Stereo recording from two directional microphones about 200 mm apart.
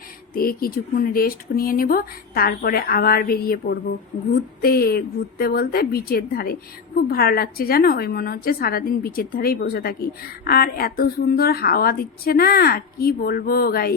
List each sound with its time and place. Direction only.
0.3 s a woman's voice: 50° left (ahead or behind)